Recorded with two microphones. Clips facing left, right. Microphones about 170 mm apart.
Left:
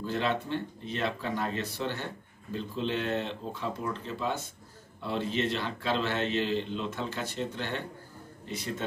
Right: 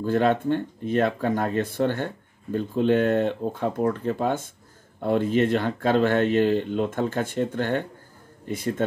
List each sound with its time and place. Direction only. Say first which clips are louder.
0.0 s speech: right 9 dB; 50° right (ahead or behind)